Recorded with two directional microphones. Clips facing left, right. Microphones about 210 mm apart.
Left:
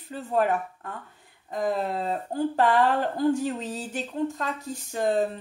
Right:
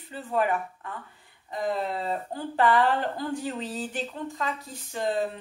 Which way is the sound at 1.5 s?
45° left (ahead or behind).